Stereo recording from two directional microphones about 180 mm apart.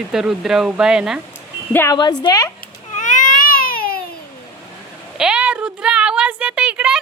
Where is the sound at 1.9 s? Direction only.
25° left (ahead or behind).